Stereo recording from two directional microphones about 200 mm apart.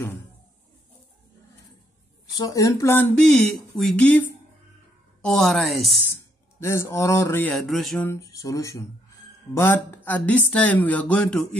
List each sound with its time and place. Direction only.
2.4 s a woman's voice: 15° left (ahead or behind); by 5.9 s centre (ahead or behind)
6.6 s speech: 15° left (ahead or behind)
8.1 s speech: 15° left (ahead or behind)